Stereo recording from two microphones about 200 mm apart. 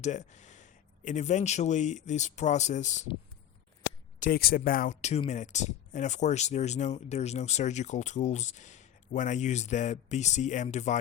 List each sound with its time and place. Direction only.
0.0 s speech: 35° left (ahead or behind)
4.2 s speech: 50° left (ahead or behind)